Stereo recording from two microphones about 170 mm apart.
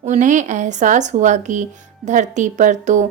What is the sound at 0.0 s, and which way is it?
A woman's voice, 45° right (ahead or behind).